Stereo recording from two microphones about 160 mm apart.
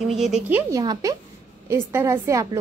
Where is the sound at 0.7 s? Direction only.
25° right (ahead or behind).